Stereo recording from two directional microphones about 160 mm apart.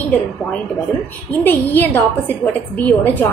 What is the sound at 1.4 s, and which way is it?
A woman's voice, 10° left (ahead or behind).